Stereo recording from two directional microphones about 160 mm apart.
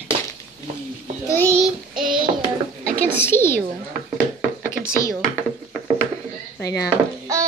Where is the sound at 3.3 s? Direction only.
20° right (ahead or behind).